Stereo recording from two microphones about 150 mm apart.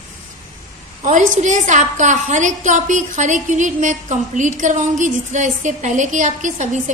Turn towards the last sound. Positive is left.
turn(degrees=-55)  # may be behind; listen again after turning